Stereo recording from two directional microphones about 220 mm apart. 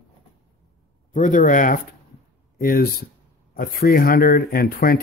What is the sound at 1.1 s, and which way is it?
Speech, 35° left (ahead or behind).